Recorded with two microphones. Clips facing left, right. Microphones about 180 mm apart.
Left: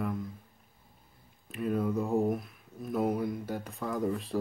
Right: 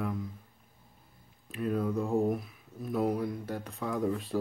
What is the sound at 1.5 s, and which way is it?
Speech, centre (ahead or behind).